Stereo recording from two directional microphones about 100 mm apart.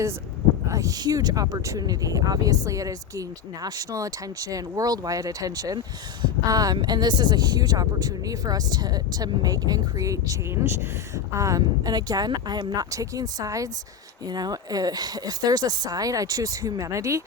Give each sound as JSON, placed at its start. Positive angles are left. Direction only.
{"t": 0.7, "sound": "speech", "side_deg": -35}